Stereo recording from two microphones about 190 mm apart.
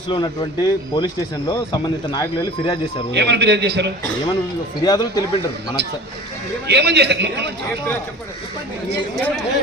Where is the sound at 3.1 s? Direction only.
60° right (ahead or behind).